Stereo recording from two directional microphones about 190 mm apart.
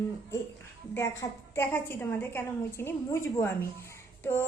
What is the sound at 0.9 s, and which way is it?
A woman's voice, 15° left (ahead or behind).